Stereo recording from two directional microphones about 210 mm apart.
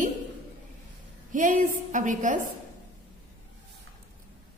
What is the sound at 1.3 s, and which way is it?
A woman's voice, 40° right (ahead or behind).